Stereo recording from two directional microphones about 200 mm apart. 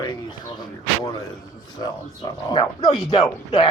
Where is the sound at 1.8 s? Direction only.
20° left (ahead or behind).